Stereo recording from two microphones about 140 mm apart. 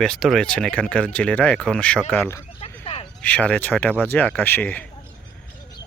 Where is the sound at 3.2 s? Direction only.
10° left (ahead or behind).